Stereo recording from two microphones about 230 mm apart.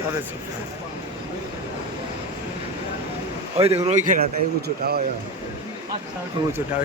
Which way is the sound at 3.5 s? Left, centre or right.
Right.